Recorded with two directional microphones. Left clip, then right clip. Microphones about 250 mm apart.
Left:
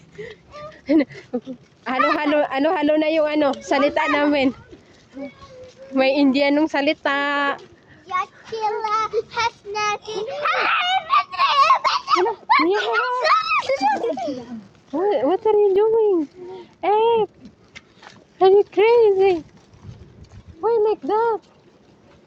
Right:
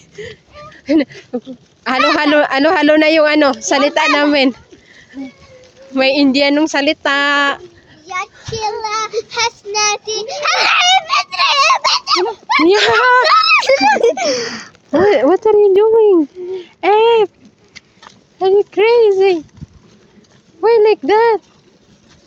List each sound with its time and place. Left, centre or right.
0.2 s speech: centre
2.1 s speech: right
3.5 s speech: centre
5.9 s speech: centre
8.0 s child singing: right
13.5 s a child's voice: right
15.1 s speech: centre
18.3 s speech: centre
20.6 s speech: right